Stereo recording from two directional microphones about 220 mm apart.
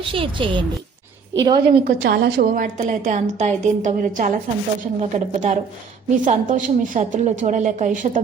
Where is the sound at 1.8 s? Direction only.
45° right (ahead or behind).